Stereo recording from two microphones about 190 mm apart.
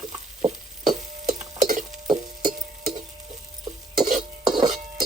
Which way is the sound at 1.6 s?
40° right (ahead or behind).